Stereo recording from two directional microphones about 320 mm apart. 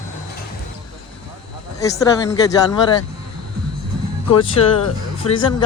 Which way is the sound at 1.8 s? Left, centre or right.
Centre.